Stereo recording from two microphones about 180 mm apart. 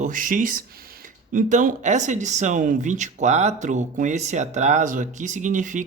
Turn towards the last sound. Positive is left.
turn(degrees=-45)  # may be behind; listen again after turning